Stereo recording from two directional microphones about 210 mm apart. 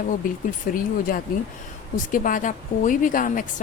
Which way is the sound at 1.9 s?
40° left (ahead or behind).